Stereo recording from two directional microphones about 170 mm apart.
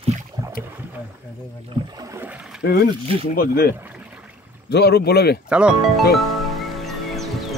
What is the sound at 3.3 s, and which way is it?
Speech, 60° left (ahead or behind).